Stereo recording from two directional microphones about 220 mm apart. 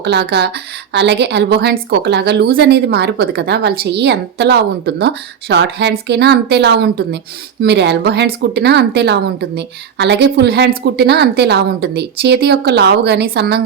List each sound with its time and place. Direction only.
0.0 s a woman's voice: 50° right (ahead or behind)